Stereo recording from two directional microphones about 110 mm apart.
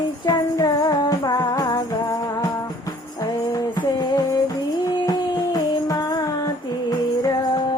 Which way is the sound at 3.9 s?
40° left (ahead or behind).